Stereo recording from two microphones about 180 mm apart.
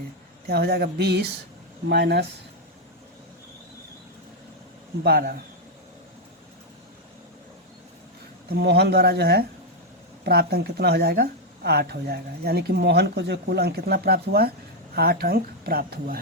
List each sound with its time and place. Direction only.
0.4 s speech: 65° right (ahead or behind)
5.0 s speech: 60° right (ahead or behind)
8.4 s speech: 65° right (ahead or behind)